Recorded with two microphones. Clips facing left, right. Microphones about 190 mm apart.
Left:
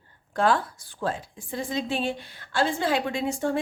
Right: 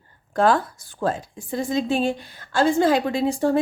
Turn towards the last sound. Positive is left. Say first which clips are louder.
# right 6 dB
turn(degrees=-35)  # may be behind; listen again after turning